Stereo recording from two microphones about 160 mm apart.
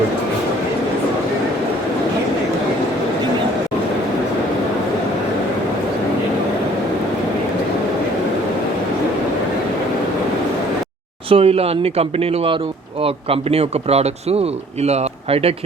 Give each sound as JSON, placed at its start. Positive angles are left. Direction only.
{"t": 11.3, "sound": "a man's voice", "side_deg": -35}